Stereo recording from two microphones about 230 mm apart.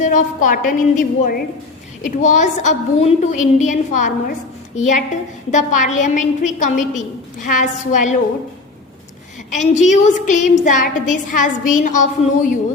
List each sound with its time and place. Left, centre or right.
0.0 s a woman's voice: left
9.5 s a woman's voice: left